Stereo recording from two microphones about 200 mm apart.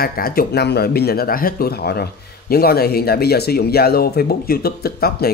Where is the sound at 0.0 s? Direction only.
45° left (ahead or behind).